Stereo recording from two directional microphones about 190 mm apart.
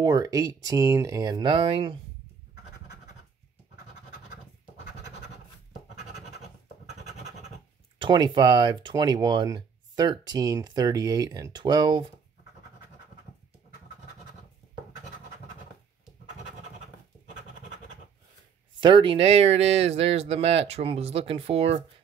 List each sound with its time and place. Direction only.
0.0 s speech: 20° right (ahead or behind)
8.0 s speech: 25° right (ahead or behind)
18.8 s speech: 25° right (ahead or behind)